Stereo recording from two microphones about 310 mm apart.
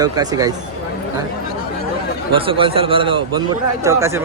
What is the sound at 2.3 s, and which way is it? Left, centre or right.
Speech, centre.